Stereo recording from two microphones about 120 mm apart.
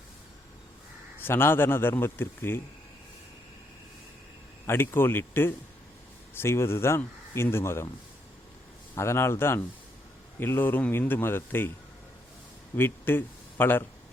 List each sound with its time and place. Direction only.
1.2 s speech: 20° left (ahead or behind)
4.6 s speech: 20° left (ahead or behind)
9.0 s speech: 20° left (ahead or behind)
12.7 s speech: 15° left (ahead or behind)